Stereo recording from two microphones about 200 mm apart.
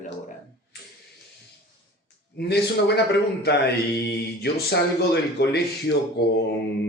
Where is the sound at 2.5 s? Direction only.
55° left (ahead or behind).